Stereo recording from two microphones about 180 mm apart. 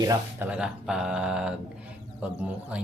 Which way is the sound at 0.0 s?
20° right (ahead or behind).